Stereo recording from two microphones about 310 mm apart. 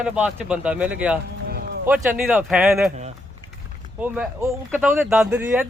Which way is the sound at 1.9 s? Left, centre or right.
Centre.